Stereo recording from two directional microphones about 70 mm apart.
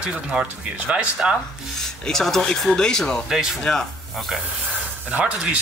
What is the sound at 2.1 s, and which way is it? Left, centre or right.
Speech, centre.